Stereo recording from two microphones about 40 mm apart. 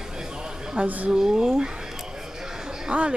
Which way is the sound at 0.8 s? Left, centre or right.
Right.